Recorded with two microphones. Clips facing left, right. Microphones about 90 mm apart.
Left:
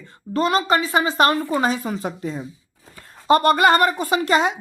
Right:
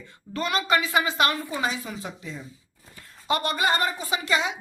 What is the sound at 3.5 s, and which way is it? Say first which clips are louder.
Speech: left 9 dB; 60° left (ahead or behind).